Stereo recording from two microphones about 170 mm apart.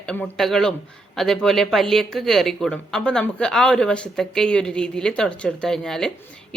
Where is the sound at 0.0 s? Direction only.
5° left (ahead or behind).